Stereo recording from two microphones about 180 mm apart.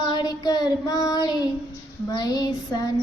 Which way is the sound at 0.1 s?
20° left (ahead or behind).